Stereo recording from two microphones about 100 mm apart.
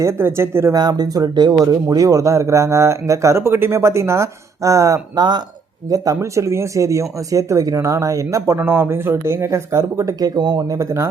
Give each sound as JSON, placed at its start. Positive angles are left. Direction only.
{"t": 0.0, "sound": "speech", "side_deg": -25}
{"t": 0.8, "sound": "speech", "side_deg": -40}
{"t": 10.8, "sound": "speech", "side_deg": -30}